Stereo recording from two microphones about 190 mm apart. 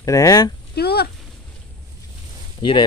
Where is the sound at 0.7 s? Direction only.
60° left (ahead or behind).